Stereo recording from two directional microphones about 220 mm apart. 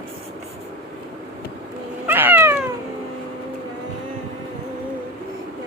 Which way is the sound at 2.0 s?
10° right (ahead or behind).